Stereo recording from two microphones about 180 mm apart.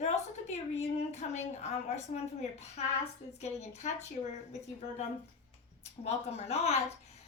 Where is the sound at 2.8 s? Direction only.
35° left (ahead or behind).